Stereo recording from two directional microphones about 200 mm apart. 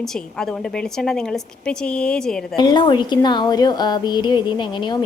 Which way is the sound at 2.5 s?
20° left (ahead or behind).